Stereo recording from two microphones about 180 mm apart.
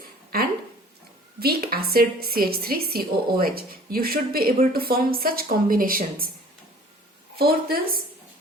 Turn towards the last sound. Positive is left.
turn(degrees=-55)  # may be behind; listen again after turning